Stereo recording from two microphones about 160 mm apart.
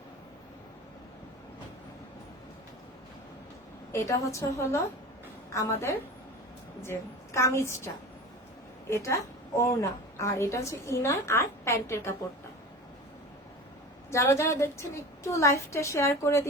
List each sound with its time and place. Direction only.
3.9 s a woman's voice: 20° left (ahead or behind)
6.9 s a woman's voice: 15° left (ahead or behind)
8.9 s a woman's voice: 20° left (ahead or behind)
14.1 s a woman's voice: 20° left (ahead or behind)